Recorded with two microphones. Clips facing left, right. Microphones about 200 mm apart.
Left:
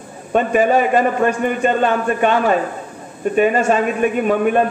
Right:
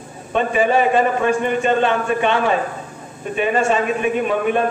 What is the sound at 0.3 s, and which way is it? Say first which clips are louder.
A man's voice: left 3 dB; 45° left (ahead or behind).